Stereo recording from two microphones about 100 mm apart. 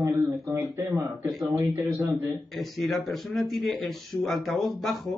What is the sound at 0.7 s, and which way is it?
Speech, 30° right (ahead or behind).